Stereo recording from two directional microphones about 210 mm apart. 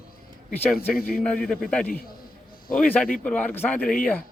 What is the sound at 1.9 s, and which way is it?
A man's voice, 45° left (ahead or behind).